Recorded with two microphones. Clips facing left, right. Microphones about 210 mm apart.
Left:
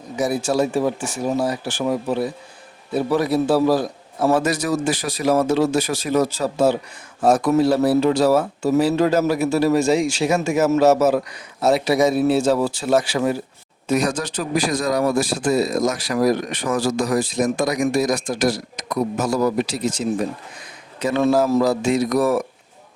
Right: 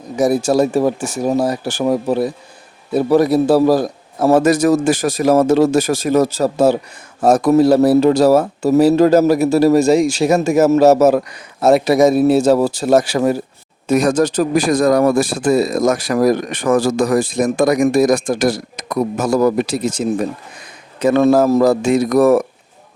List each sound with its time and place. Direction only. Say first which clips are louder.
0.2 s a man's voice: right 6 dB; 40° right (ahead or behind)